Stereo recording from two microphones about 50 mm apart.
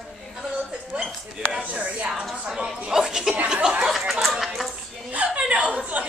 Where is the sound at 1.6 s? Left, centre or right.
Right.